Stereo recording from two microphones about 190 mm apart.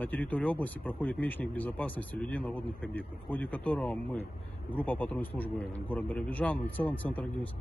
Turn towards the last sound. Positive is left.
turn(degrees=10)  # may be behind; listen again after turning